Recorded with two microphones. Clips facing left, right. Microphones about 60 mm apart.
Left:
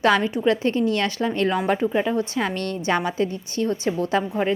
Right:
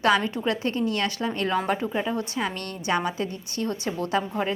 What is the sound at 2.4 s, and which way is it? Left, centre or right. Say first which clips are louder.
A woman's voice: left 5 dB; left.